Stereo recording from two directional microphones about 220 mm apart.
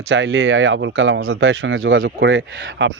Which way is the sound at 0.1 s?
60° right (ahead or behind).